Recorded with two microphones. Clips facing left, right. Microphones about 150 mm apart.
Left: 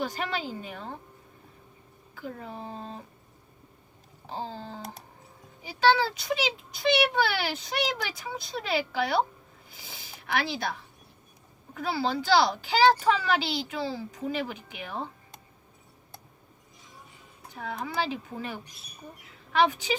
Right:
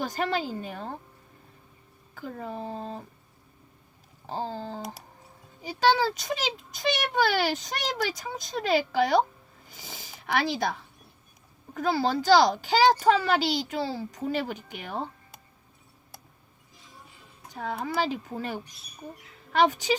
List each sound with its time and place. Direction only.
0.0 s a child's voice: 40° right (ahead or behind)
2.1 s a child's voice: 45° right (ahead or behind)
4.3 s a child's voice: 45° right (ahead or behind)
6.1 s a child's voice: 45° right (ahead or behind)
17.5 s a child's voice: 40° right (ahead or behind)